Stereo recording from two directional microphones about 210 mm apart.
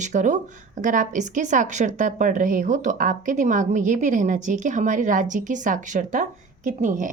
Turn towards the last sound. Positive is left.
turn(degrees=-35)  # may be behind; listen again after turning